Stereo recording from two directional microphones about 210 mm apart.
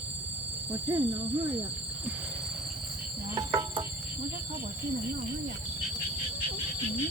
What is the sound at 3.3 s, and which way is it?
Cricket, 20° right (ahead or behind).